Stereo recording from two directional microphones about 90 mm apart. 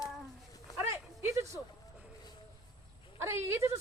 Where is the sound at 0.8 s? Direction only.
30° right (ahead or behind).